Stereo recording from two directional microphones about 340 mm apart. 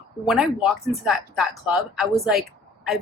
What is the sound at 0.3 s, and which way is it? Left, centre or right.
A woman's voice, centre.